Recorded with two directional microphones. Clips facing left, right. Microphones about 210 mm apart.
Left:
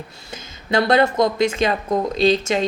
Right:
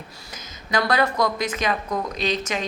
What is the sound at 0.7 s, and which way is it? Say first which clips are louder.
Speech: left 5 dB; 25° left (ahead or behind).